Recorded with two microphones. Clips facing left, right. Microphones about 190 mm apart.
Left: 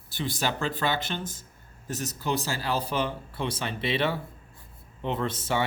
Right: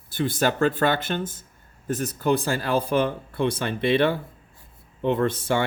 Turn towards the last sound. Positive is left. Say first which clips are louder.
# right 6 dB
turn(degrees=-55)  # may be behind; listen again after turning